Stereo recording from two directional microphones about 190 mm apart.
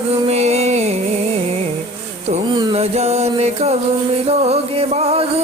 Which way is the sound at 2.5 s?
25° right (ahead or behind).